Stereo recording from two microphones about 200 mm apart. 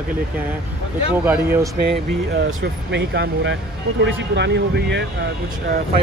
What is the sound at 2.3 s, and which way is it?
Speech, 75° right (ahead or behind).